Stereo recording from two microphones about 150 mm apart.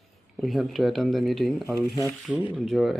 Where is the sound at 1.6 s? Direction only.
20° left (ahead or behind).